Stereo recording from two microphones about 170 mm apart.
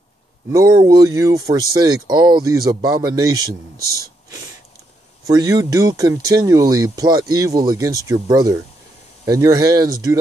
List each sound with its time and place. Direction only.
0.5 s speech: 20° right (ahead or behind)
5.2 s speech: 20° right (ahead or behind)